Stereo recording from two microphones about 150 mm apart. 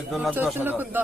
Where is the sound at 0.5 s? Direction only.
15° right (ahead or behind).